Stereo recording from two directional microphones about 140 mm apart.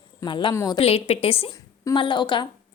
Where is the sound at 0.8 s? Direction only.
45° left (ahead or behind).